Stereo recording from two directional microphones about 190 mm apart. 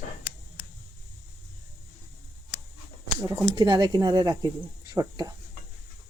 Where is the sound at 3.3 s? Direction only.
20° right (ahead or behind).